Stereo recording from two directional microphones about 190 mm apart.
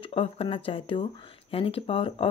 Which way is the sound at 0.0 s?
30° left (ahead or behind).